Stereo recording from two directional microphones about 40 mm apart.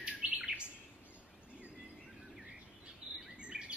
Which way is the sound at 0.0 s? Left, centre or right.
Right.